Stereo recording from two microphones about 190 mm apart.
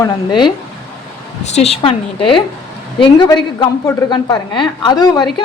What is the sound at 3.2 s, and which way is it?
A woman's voice, 20° left (ahead or behind).